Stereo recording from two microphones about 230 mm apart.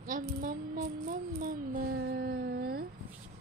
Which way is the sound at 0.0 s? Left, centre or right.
Right.